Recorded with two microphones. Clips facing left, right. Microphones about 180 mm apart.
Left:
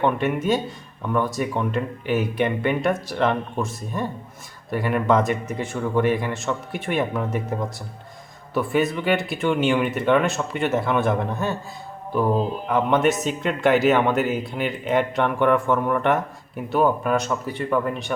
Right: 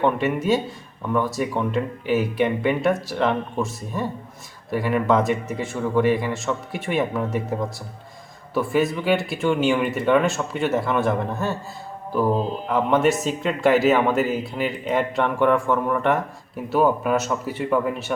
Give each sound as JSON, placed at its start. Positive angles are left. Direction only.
{"t": 0.0, "sound": "speech", "side_deg": 0}